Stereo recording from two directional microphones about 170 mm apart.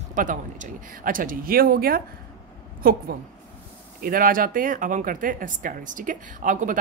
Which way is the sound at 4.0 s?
60° right (ahead or behind).